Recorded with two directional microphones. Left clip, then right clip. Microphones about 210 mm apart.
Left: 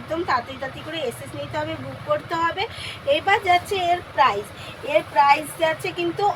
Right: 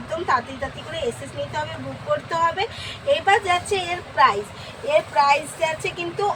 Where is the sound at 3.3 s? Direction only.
20° left (ahead or behind).